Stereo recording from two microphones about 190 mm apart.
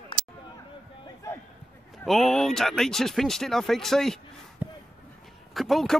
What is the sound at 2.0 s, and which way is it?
Speech, centre (ahead or behind).